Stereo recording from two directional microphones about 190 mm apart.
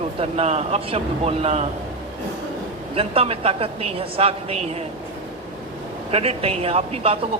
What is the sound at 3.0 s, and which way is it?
A man's voice, 30° right (ahead or behind).